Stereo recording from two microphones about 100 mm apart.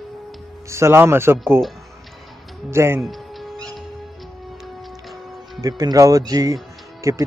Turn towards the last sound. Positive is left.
turn(degrees=-30)  # may be behind; listen again after turning